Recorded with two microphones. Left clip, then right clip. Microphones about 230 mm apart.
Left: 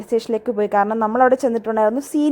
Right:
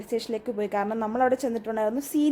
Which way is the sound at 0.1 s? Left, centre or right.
Left.